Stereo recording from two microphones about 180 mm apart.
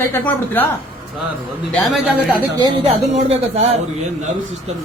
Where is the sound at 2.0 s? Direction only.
5° right (ahead or behind).